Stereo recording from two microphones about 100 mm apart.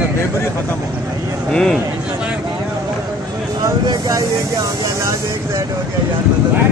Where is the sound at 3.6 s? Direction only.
35° right (ahead or behind).